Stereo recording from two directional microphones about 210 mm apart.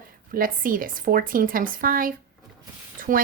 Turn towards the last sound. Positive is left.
turn(degrees=-40)  # may be behind; listen again after turning